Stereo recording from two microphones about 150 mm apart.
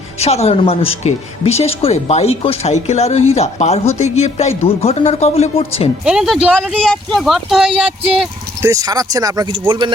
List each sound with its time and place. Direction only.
0.2 s speech: 45° left (ahead or behind)
6.1 s speech: 5° right (ahead or behind)
6.9 s speech: 5° left (ahead or behind)
8.6 s speech: 25° right (ahead or behind)